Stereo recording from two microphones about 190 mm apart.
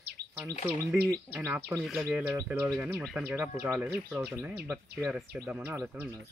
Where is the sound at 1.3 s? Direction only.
10° right (ahead or behind).